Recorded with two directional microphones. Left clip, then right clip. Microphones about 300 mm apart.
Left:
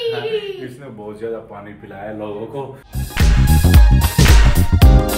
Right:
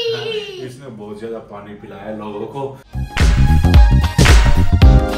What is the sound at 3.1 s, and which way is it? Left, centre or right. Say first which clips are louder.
Music: right 1 dB; centre.